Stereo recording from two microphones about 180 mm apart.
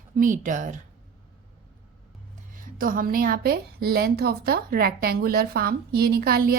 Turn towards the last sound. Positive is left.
turn(degrees=-55)  # may be behind; listen again after turning